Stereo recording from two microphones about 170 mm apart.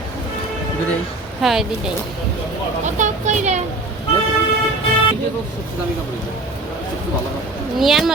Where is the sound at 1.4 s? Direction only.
Centre (ahead or behind).